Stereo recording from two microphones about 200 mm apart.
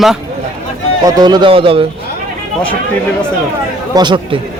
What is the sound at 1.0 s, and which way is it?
Speech, 20° right (ahead or behind).